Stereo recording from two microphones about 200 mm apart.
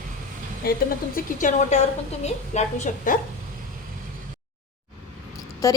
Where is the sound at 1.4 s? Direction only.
35° left (ahead or behind).